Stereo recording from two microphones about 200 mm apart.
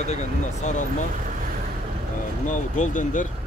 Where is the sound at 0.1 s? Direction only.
35° left (ahead or behind).